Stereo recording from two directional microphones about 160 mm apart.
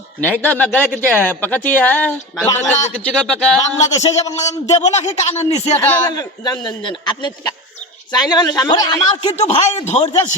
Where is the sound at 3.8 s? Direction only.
45° left (ahead or behind).